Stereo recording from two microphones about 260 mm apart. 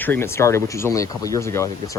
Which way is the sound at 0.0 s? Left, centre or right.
Centre.